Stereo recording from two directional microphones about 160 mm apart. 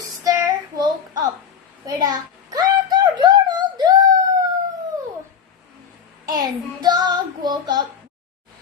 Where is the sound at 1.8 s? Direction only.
25° right (ahead or behind).